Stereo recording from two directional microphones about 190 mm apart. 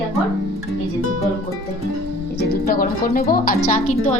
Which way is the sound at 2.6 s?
50° left (ahead or behind).